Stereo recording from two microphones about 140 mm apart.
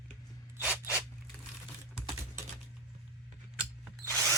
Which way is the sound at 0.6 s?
10° right (ahead or behind).